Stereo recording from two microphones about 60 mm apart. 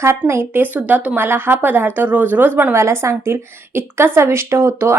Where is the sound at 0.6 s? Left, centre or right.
Right.